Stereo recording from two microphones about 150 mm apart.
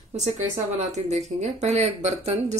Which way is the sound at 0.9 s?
50° right (ahead or behind).